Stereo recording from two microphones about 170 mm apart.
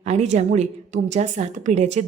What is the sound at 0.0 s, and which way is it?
A woman's voice, 40° right (ahead or behind).